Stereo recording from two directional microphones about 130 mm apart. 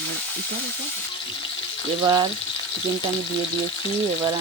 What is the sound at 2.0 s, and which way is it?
Speech, 35° right (ahead or behind).